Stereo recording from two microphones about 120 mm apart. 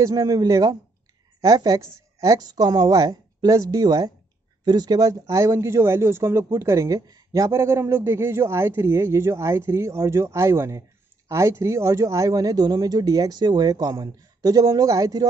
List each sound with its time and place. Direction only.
0.0 s speech: 35° right (ahead or behind)